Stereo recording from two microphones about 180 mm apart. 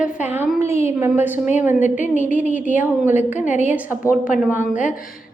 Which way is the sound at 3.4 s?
40° left (ahead or behind).